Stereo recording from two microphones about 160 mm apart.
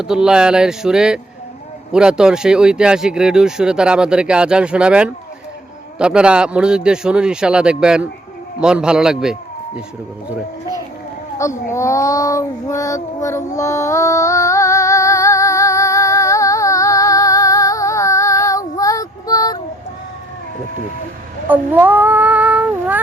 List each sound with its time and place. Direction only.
0.0 s speech: 5° right (ahead or behind)
11.7 s child singing: 20° left (ahead or behind)
13.6 s music: 20° left (ahead or behind)
21.4 s cat: 10° right (ahead or behind)